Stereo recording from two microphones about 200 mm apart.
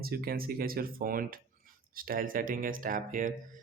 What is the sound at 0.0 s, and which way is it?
Speech, 50° right (ahead or behind).